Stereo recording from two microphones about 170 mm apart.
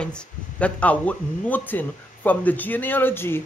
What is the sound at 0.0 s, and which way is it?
Speech, 5° left (ahead or behind).